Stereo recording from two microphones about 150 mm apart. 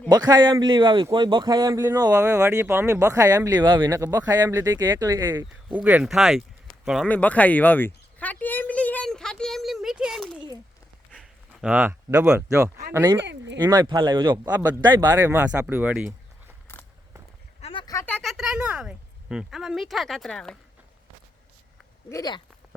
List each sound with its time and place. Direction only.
0.1 s speech: 25° right (ahead or behind)
5.7 s a woman's voice: 10° right (ahead or behind)
7.1 s a sound: 10° left (ahead or behind)
11.1 s speech: 5° right (ahead or behind)
13.6 s speech: 30° right (ahead or behind); by 16.0 s 10° right (ahead or behind)
17.6 s a sound: 35° left (ahead or behind)
18.0 s a woman's voice: 5° left (ahead or behind)
22.1 s speech: 25° left (ahead or behind)